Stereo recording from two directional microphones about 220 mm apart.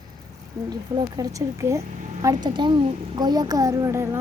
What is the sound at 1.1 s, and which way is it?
A woman's voice, 15° right (ahead or behind).